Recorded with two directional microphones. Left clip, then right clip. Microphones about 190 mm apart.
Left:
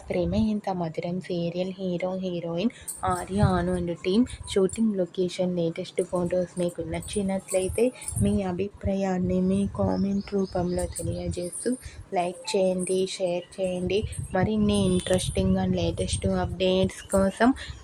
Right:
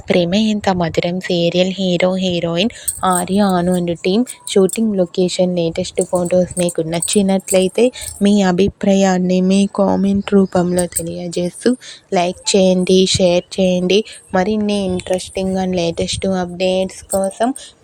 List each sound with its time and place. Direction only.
0.1 s a woman's voice: 35° right (ahead or behind)
15.5 s a woman's voice: 45° right (ahead or behind)
17.1 s speech: 10° right (ahead or behind)